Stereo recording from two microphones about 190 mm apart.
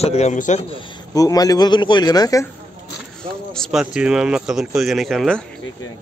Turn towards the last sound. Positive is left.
turn(degrees=0)  # may be behind; listen again after turning